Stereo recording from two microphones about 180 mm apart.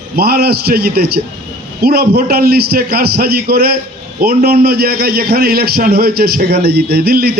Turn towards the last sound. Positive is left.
turn(degrees=-60)  # may be behind; listen again after turning